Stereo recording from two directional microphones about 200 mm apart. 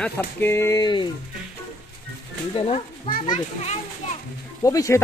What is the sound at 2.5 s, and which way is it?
A child's voice, 30° left (ahead or behind).